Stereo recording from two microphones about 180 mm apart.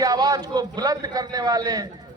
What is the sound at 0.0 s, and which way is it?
A man's voice, 20° right (ahead or behind).